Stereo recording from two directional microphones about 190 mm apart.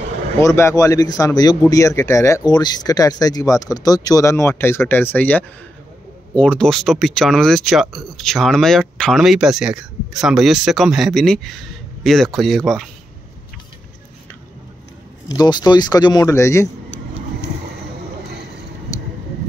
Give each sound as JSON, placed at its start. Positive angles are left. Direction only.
{"t": 0.4, "sound": "speech", "side_deg": 15}
{"t": 15.2, "sound": "speech", "side_deg": 20}